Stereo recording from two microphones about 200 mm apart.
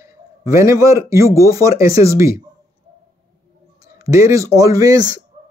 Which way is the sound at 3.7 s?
15° right (ahead or behind).